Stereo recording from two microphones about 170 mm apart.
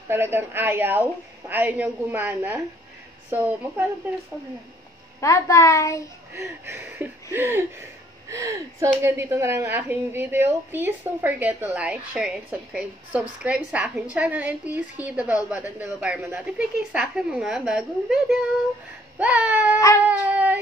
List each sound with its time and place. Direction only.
0.1 s a woman's voice: 15° right (ahead or behind)
5.2 s a woman's voice: 20° left (ahead or behind)
6.3 s a woman's voice: 15° right (ahead or behind)